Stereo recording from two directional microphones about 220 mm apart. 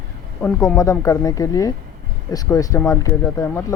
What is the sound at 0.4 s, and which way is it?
Speech, 10° left (ahead or behind).